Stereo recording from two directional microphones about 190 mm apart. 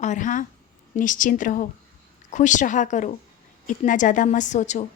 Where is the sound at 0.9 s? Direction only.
40° left (ahead or behind).